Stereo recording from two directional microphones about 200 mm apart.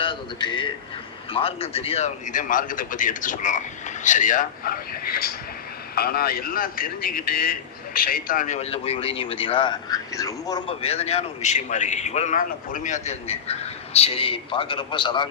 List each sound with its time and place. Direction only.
0.0 s a man's voice: 25° left (ahead or behind)
10.8 s a man's voice: 30° left (ahead or behind)